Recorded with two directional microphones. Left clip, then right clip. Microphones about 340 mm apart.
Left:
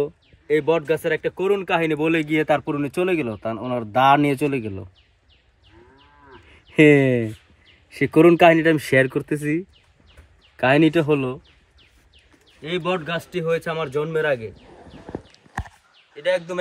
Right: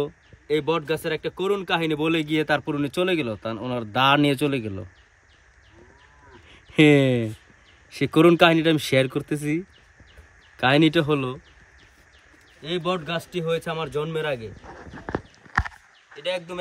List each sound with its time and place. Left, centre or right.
0.0 s speech: centre
6.5 s speech: centre
10.6 s speech: centre
12.6 s speech: centre
14.0 s speech: left